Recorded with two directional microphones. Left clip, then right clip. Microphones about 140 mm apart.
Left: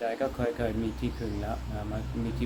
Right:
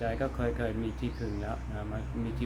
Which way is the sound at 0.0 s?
15° right (ahead or behind).